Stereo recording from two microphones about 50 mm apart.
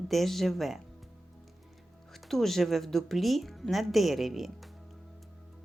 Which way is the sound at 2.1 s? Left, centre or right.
Centre.